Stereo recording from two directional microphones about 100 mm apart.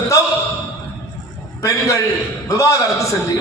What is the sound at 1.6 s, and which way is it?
A man's voice, 35° left (ahead or behind).